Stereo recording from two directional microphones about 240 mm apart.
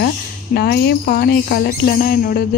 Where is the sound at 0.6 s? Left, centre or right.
Left.